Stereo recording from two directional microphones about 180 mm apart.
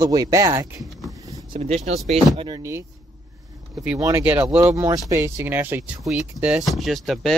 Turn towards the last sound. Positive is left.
turn(degrees=0)  # may be behind; listen again after turning